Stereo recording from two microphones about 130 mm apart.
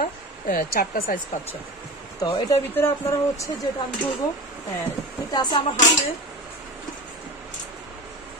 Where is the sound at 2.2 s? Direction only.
30° left (ahead or behind).